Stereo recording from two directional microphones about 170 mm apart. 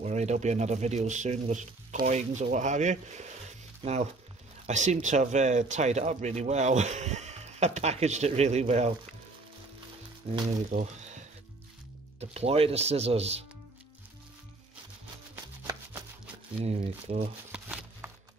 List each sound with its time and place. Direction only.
0.0 s speech: 40° right (ahead or behind)
10.3 s speech: 40° right (ahead or behind)
10.7 s a sound: 45° right (ahead or behind)
12.2 s speech: 35° right (ahead or behind)
15.3 s music: 10° right (ahead or behind)
16.6 s speech: 40° right (ahead or behind)
17.5 s a sound: 5° right (ahead or behind)